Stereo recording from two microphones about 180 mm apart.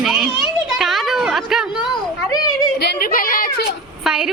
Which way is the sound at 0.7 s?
Centre (ahead or behind).